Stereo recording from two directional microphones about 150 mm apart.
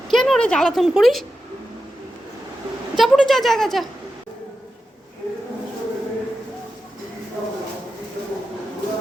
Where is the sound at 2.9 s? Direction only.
Centre (ahead or behind).